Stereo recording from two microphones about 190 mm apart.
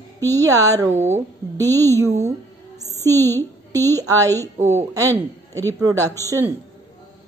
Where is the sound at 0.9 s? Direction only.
35° right (ahead or behind).